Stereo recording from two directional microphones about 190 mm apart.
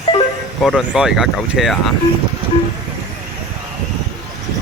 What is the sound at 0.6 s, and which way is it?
Speech, centre (ahead or behind).